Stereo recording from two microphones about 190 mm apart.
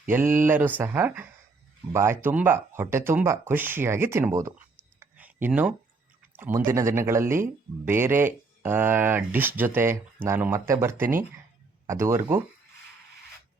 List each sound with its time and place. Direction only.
0.1 s speech: 10° right (ahead or behind)
4.9 s a sound: 10° right (ahead or behind)
6.3 s speech: 10° right (ahead or behind)